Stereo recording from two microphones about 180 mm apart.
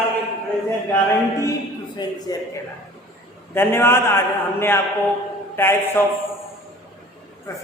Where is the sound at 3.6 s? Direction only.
15° left (ahead or behind).